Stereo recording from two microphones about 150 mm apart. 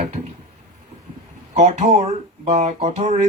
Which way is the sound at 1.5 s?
45° right (ahead or behind).